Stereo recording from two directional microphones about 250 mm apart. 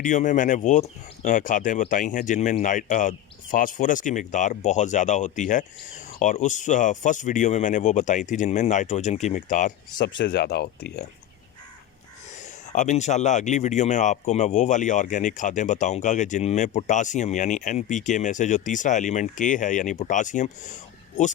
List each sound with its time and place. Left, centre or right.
0.0 s speech: left
10.1 s speech: left
12.4 s speech: left